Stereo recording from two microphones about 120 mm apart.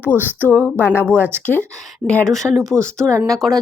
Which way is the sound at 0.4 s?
15° left (ahead or behind).